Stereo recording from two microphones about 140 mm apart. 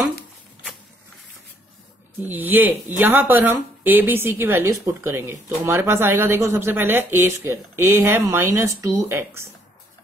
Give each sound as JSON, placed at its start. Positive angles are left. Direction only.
{"t": 2.1, "sound": "a woman's voice", "side_deg": -15}